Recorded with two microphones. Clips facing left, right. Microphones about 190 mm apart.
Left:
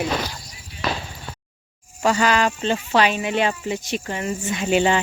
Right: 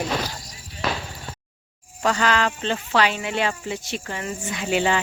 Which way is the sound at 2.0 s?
10° left (ahead or behind).